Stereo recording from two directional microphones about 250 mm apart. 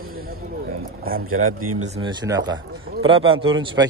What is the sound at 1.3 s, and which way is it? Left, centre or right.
Speech, right.